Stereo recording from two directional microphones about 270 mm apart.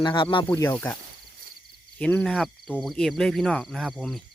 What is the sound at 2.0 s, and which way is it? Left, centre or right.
Speech, centre.